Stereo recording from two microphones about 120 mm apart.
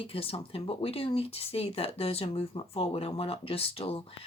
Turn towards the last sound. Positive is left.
turn(degrees=50)  # may be behind; listen again after turning